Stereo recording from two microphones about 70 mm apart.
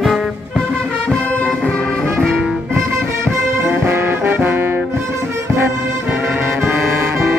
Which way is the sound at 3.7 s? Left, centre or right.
Right.